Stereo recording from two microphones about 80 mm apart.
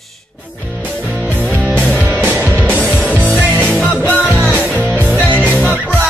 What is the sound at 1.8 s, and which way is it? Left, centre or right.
Music, left.